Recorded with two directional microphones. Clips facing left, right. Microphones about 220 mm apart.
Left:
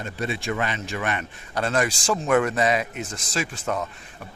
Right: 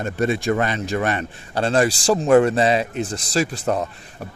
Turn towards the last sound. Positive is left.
turn(degrees=-40)  # may be behind; listen again after turning